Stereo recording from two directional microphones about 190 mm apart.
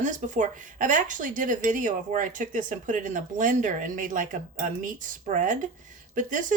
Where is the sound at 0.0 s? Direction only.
40° right (ahead or behind).